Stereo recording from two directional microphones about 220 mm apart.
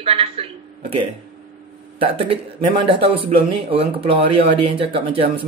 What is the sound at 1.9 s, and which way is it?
A man's voice, 25° right (ahead or behind).